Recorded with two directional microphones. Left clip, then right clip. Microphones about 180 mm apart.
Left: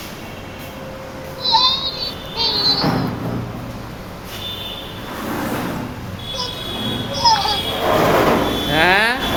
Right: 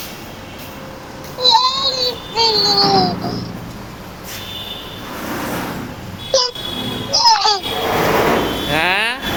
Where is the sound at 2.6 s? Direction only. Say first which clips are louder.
Right 5 dB; 55° right (ahead or behind).